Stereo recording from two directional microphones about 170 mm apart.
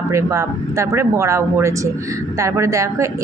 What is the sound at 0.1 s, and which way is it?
Speech, 15° right (ahead or behind).